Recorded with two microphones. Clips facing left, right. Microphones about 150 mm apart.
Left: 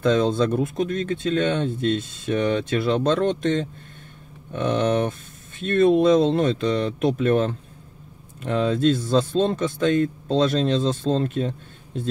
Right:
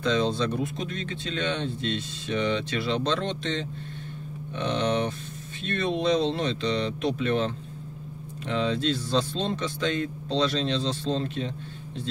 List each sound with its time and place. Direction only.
0.0 s speech: 50° left (ahead or behind)